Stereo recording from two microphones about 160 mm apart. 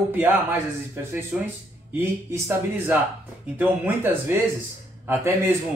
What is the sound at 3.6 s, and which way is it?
Speech, 10° right (ahead or behind).